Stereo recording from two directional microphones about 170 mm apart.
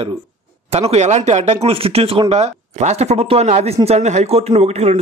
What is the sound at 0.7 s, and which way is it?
Speech, 35° right (ahead or behind).